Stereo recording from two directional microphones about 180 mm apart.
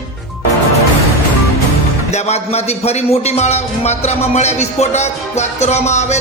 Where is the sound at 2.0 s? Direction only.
35° left (ahead or behind).